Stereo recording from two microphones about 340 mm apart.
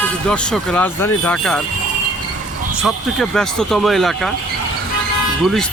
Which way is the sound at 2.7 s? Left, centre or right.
Centre.